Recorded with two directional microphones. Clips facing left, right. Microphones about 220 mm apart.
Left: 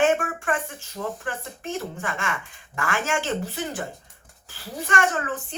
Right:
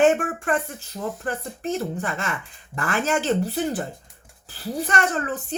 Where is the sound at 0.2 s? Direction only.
40° right (ahead or behind).